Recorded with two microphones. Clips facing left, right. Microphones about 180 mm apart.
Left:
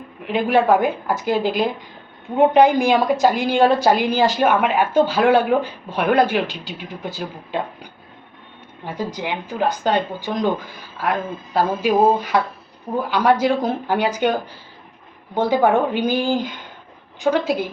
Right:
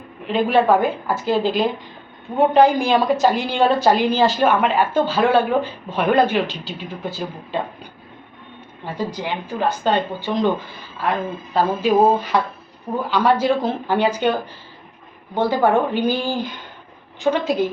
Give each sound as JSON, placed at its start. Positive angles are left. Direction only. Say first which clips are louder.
{"t": 0.3, "sound": "a woman's voice", "louder": "even", "side_deg": 10}
{"t": 9.0, "sound": "a woman's voice", "louder": "even", "side_deg": 15}
{"t": 11.5, "sound": "a woman's voice", "louder": "right 1 dB", "side_deg": 10}
{"t": 15.4, "sound": "a woman's voice", "louder": "left 1 dB", "side_deg": 15}